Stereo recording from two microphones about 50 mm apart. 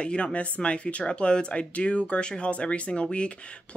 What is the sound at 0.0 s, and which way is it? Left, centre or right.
Speech, left.